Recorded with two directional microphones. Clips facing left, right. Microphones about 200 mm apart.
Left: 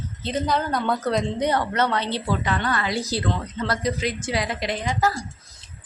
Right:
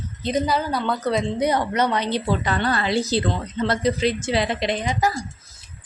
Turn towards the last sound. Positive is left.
turn(degrees=-20)  # may be behind; listen again after turning